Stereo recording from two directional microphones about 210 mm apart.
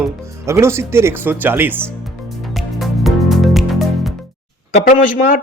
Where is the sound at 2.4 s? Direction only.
Centre (ahead or behind).